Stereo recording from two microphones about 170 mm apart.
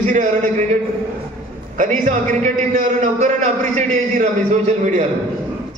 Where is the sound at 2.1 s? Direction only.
45° right (ahead or behind).